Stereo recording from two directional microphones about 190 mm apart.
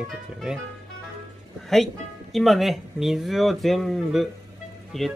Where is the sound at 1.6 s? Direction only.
Centre (ahead or behind).